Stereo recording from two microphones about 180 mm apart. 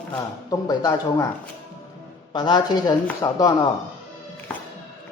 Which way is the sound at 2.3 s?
25° left (ahead or behind).